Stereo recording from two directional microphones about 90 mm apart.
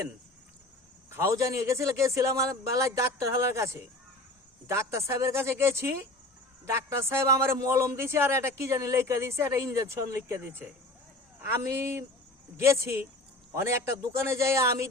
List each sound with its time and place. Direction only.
1.4 s a man's voice: 35° right (ahead or behind)